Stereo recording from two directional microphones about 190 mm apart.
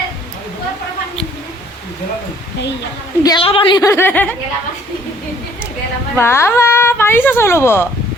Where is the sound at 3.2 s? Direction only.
25° left (ahead or behind).